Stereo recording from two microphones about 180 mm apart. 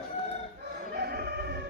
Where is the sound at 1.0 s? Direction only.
60° right (ahead or behind).